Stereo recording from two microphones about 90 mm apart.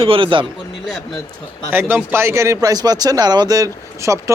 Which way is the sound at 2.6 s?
45° right (ahead or behind).